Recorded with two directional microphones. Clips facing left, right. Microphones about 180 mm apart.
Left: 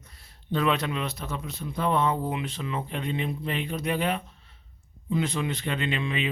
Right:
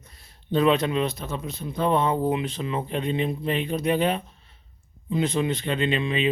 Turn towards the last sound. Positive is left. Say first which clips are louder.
# right 5 dB
turn(degrees=-20)  # may be behind; listen again after turning